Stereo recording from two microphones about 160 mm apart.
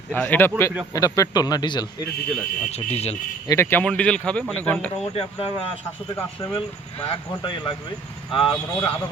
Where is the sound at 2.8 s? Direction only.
40° left (ahead or behind).